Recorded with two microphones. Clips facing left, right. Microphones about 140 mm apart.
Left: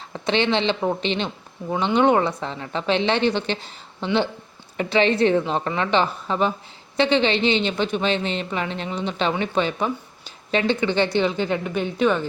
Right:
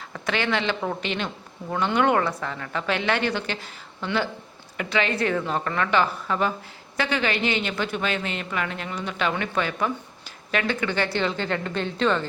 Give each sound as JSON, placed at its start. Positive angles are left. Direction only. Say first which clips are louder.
{"t": 0.1, "sound": "a woman's voice", "louder": "left 5 dB", "side_deg": 25}